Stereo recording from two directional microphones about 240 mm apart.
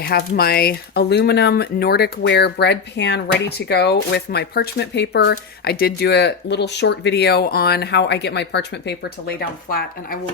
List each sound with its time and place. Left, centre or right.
0.0 s speech: left